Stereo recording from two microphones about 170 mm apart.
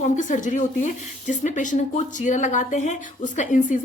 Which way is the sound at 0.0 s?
45° left (ahead or behind).